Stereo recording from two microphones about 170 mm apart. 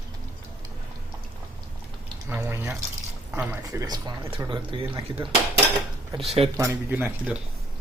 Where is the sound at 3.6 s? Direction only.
20° right (ahead or behind).